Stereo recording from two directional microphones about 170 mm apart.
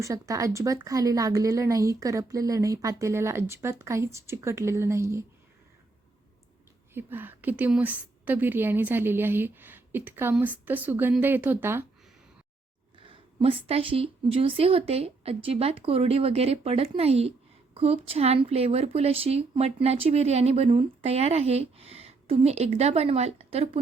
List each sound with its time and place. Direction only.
0.0 s speech: 20° right (ahead or behind)
6.9 s a woman's voice: 10° right (ahead or behind)
13.1 s a sound: 30° right (ahead or behind)
13.7 s speech: 35° right (ahead or behind)